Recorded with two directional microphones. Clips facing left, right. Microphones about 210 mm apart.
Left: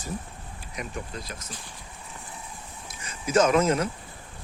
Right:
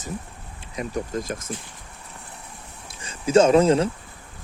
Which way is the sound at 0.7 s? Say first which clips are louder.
Right 8 dB; 40° right (ahead or behind).